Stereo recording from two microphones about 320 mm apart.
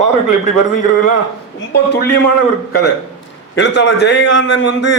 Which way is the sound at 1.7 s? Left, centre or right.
Left.